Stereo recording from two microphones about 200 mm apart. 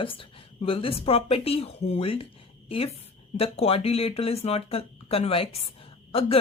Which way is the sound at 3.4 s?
30° left (ahead or behind).